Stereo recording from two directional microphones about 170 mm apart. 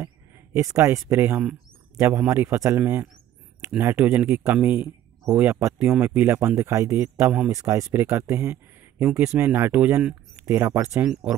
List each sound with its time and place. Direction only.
0.0 s speech: 15° right (ahead or behind)